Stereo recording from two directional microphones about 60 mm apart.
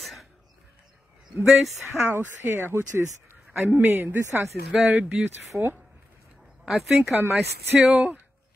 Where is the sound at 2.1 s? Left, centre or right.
Right.